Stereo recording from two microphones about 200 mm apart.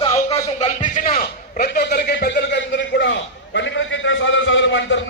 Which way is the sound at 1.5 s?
50° left (ahead or behind).